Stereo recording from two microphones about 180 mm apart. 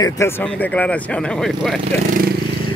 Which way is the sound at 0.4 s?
10° left (ahead or behind).